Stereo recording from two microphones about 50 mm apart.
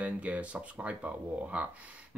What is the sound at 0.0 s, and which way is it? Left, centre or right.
Speech, right.